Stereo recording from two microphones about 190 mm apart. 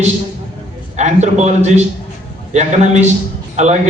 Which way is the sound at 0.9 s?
35° right (ahead or behind).